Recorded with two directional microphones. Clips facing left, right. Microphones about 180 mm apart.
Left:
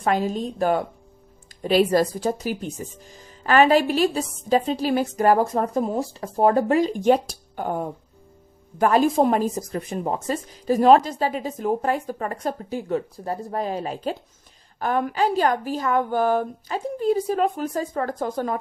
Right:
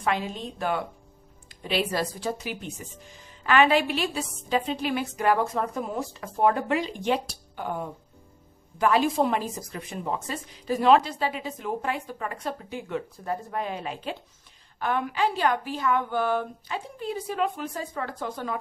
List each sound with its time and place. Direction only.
0.0 s a woman's voice: 40° left (ahead or behind)